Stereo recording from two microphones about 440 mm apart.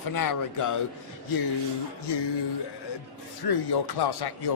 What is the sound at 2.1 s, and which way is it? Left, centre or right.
Speech, left.